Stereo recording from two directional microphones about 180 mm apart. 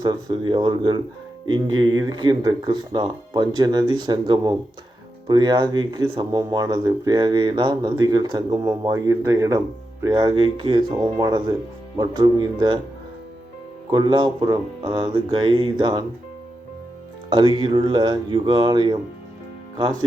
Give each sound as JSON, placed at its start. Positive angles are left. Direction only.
{"t": 0.0, "sound": "speech", "side_deg": -25}
{"t": 13.9, "sound": "speech", "side_deg": -25}
{"t": 17.2, "sound": "speech", "side_deg": -25}